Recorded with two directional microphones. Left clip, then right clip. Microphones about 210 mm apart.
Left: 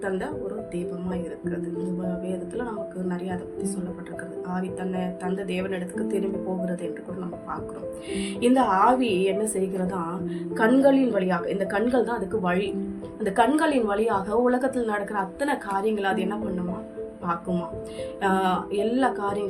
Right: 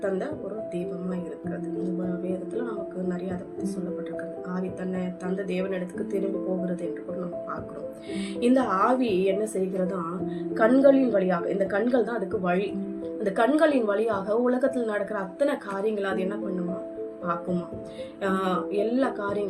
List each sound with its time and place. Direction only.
5.5 s a woman's voice: 20° left (ahead or behind)
8.1 s a woman's voice: 15° left (ahead or behind)
18.2 s a woman's voice: 20° left (ahead or behind)